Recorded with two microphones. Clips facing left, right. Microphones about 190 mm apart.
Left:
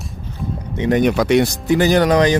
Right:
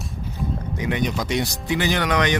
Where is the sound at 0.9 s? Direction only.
60° left (ahead or behind); by 2.4 s 35° left (ahead or behind).